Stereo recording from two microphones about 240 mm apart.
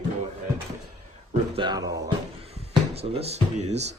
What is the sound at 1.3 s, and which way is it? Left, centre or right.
Speech, centre.